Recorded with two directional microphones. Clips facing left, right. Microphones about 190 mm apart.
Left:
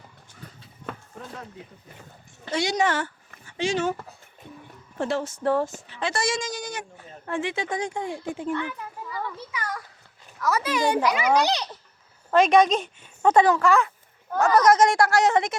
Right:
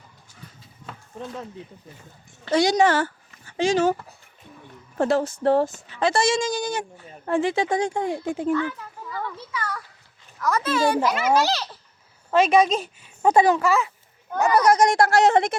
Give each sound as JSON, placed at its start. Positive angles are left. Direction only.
{"t": 2.5, "sound": "speech", "side_deg": -40}
{"t": 4.9, "sound": "speech", "side_deg": -40}
{"t": 8.2, "sound": "a child's voice", "side_deg": -45}
{"t": 8.5, "sound": "a child's voice", "side_deg": 15}
{"t": 12.3, "sound": "speech", "side_deg": 0}